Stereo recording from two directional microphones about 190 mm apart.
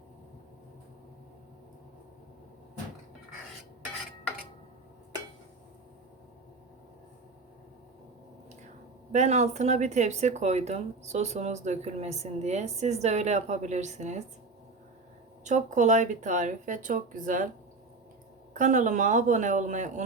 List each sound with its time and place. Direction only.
9.1 s speech: 35° right (ahead or behind)
15.4 s speech: 40° right (ahead or behind)
18.5 s speech: 40° right (ahead or behind)